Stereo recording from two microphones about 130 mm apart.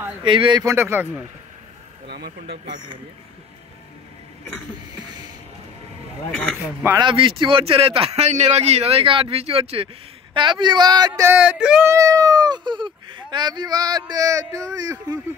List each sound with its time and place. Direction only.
0.2 s a man's voice: 40° right (ahead or behind)
0.7 s speech: 15° right (ahead or behind)
2.4 s a man's voice: 45° right (ahead or behind)
7.0 s a man's voice: 40° right (ahead or behind)
11.3 s speech: 10° right (ahead or behind)
11.8 s speech: 25° right (ahead or behind)